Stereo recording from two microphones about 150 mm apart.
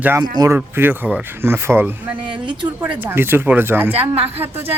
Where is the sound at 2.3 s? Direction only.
30° right (ahead or behind).